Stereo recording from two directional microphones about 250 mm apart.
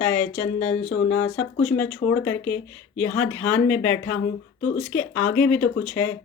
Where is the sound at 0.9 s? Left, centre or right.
Left.